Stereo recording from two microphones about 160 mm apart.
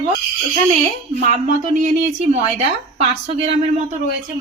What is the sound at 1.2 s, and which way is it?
Speech, 50° right (ahead or behind).